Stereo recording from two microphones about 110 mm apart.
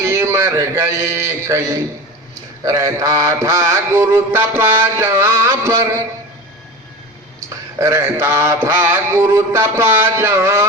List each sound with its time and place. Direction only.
0.0 s mantra: 25° right (ahead or behind)
7.5 s mantra: 25° right (ahead or behind)